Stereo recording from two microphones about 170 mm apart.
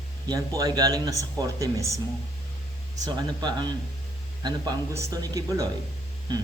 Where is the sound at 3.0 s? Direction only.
25° right (ahead or behind).